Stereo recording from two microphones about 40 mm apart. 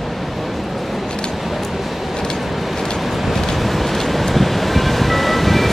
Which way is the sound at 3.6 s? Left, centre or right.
Centre.